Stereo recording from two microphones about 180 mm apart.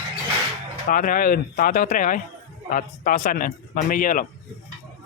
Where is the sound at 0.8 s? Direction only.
50° left (ahead or behind).